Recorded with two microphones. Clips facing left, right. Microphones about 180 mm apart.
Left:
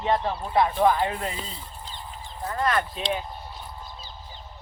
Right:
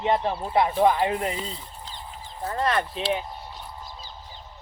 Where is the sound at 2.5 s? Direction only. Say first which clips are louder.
Even; 25° right (ahead or behind).